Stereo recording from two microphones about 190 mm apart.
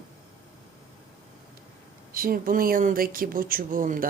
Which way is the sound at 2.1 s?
50° right (ahead or behind).